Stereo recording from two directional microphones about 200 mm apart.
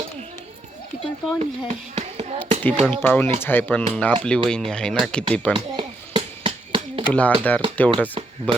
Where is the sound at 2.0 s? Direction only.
30° right (ahead or behind).